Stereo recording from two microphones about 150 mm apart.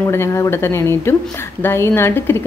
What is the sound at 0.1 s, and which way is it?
A woman's voice, 15° left (ahead or behind).